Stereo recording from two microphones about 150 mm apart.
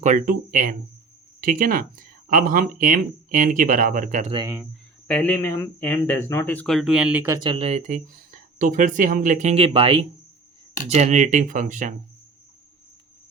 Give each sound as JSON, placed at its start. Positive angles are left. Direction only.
{"t": 0.0, "sound": "speech", "side_deg": -55}
{"t": 4.6, "sound": "speech", "side_deg": 10}
{"t": 6.7, "sound": "speech", "side_deg": -5}
{"t": 7.3, "sound": "speech", "side_deg": -35}
{"t": 8.1, "sound": "speech", "side_deg": -65}
{"t": 10.8, "sound": "speech", "side_deg": -50}